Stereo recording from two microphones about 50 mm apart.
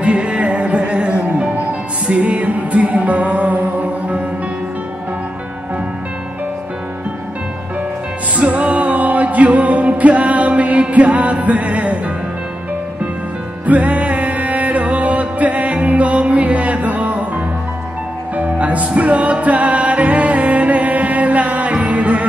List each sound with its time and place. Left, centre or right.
0.0 s music: right
8.4 s music: right
13.7 s music: right
18.3 s music: right